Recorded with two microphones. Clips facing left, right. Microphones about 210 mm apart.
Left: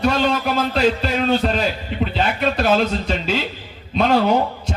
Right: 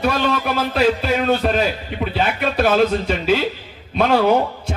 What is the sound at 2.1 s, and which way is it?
Speech, 55° right (ahead or behind).